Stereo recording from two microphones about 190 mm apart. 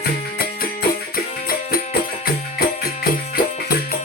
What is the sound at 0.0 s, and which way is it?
Music, 55° left (ahead or behind).